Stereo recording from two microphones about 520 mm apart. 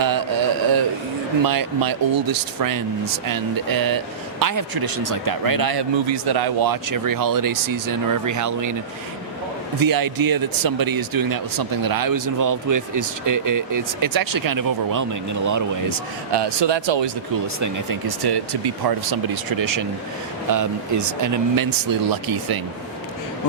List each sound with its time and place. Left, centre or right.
0.0 s a sound: right
1.5 s speech: right
9.8 s speech: right
16.3 s speech: right
17.6 s speech: right